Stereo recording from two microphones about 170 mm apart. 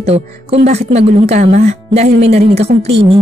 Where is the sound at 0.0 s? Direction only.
35° right (ahead or behind).